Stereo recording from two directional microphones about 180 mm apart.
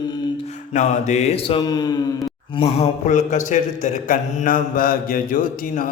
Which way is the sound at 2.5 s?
35° left (ahead or behind).